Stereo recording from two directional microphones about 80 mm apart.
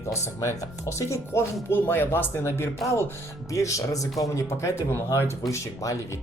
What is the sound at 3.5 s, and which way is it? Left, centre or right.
Speech, left.